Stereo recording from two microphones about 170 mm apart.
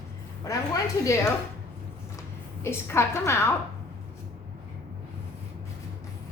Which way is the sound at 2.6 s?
15° left (ahead or behind).